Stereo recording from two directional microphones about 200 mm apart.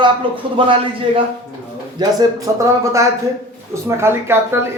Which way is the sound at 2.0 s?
20° right (ahead or behind).